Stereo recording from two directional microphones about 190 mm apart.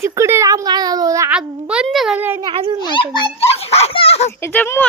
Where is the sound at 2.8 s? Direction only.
25° left (ahead or behind).